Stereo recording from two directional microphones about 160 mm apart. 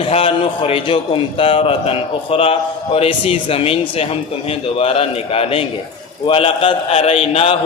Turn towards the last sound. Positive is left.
turn(degrees=35)  # may be behind; listen again after turning